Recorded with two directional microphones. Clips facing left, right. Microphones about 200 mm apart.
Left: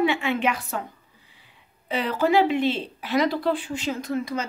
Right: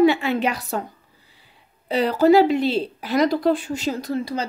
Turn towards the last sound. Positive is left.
turn(degrees=-35)  # may be behind; listen again after turning